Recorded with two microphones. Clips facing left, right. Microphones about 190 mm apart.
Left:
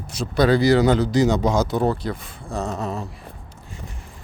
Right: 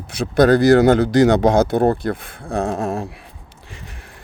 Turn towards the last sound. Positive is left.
turn(degrees=-50)  # may be behind; listen again after turning